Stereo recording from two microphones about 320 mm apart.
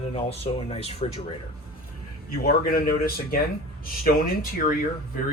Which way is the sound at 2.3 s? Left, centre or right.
Left.